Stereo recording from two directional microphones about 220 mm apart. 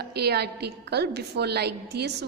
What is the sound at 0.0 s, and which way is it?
A woman's voice, 45° right (ahead or behind).